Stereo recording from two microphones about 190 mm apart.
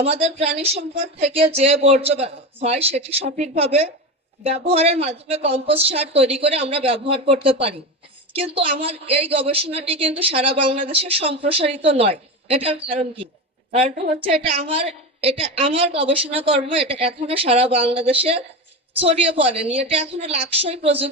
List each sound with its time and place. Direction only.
0.0 s a woman's voice: 30° right (ahead or behind)